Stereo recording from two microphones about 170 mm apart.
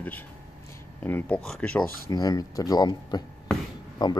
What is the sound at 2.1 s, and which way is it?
Speech, 20° left (ahead or behind).